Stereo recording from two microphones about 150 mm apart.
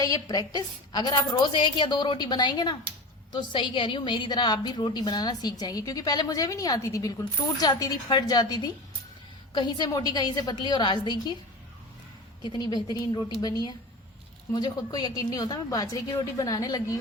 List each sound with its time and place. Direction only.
0.0 s a woman's voice: 25° left (ahead or behind)
12.4 s a woman's voice: 30° left (ahead or behind)